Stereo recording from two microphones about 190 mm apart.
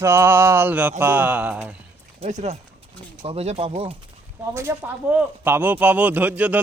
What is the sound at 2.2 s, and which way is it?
Speech, 35° right (ahead or behind).